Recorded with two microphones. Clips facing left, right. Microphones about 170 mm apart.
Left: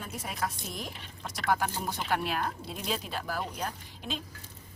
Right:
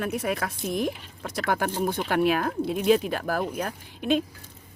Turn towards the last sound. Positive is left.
turn(degrees=-60)  # may be behind; listen again after turning